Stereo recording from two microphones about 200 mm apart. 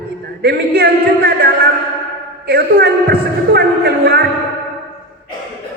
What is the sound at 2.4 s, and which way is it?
A man's voice, 50° right (ahead or behind).